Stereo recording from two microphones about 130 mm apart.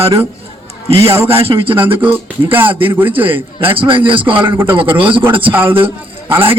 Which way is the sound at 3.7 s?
40° right (ahead or behind).